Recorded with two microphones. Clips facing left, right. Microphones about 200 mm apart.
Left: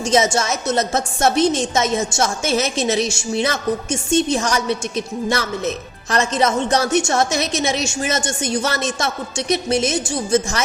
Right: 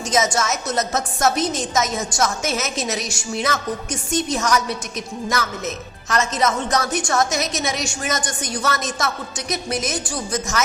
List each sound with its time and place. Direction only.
0.0 s a woman's voice: 30° left (ahead or behind)